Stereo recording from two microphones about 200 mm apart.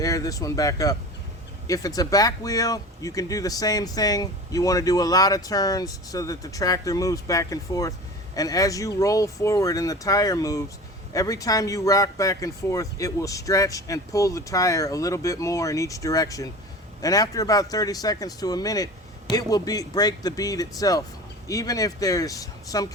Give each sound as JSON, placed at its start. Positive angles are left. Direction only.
{"t": 0.0, "sound": "speech", "side_deg": 15}